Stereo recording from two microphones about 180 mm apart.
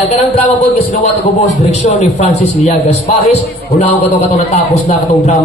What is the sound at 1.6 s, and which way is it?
A man's voice, 40° left (ahead or behind).